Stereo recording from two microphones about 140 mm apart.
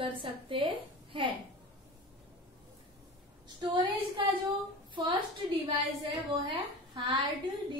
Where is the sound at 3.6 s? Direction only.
35° right (ahead or behind).